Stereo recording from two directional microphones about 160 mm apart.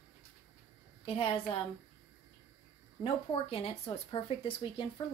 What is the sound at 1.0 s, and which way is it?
Speech, 35° left (ahead or behind).